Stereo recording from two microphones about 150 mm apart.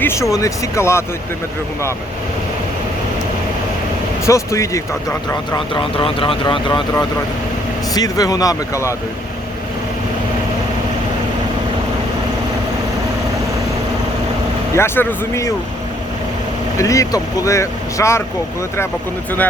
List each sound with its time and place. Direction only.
0.0 s speech: 20° left (ahead or behind)
4.3 s speech: 20° left (ahead or behind)
7.9 s speech: 25° left (ahead or behind)
14.8 s speech: 15° left (ahead or behind)
16.7 s speech: 20° left (ahead or behind)